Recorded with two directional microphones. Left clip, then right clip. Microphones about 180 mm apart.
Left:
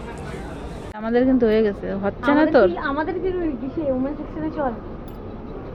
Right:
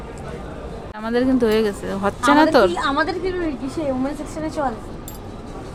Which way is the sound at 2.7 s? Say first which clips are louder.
Right 4 dB; 15° left (ahead or behind).